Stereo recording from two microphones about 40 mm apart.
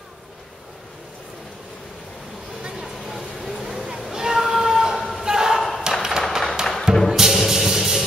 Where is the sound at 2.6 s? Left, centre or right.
Centre.